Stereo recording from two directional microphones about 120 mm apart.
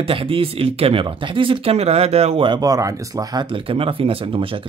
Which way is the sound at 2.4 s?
35° right (ahead or behind).